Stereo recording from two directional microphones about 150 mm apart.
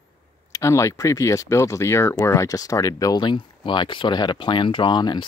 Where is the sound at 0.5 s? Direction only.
20° left (ahead or behind).